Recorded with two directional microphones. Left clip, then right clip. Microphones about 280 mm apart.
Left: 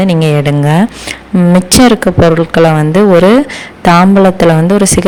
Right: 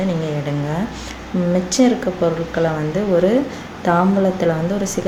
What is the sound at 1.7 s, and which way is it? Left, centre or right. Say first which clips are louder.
Speech: left 11 dB; left.